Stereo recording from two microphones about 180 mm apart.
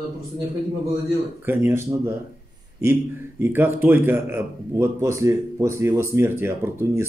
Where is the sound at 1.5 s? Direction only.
15° right (ahead or behind).